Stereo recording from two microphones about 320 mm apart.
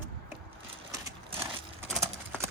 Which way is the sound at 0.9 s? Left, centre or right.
Centre.